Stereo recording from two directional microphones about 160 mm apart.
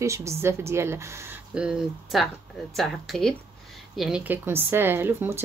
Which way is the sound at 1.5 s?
5° right (ahead or behind).